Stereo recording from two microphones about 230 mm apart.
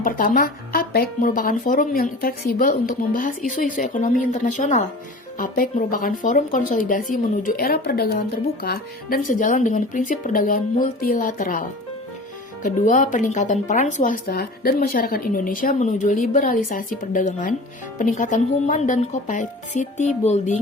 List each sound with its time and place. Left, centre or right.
0.0 s speech: left
12.6 s speech: left